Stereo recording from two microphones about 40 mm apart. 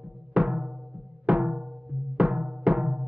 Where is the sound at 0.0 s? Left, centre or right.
Right.